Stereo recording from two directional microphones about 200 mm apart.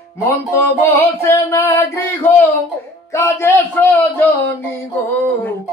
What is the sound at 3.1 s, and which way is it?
Speech, 15° left (ahead or behind).